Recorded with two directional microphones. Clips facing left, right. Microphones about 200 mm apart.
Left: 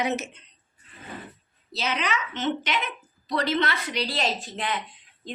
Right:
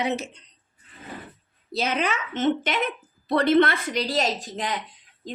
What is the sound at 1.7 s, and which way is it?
A woman's voice, 50° right (ahead or behind).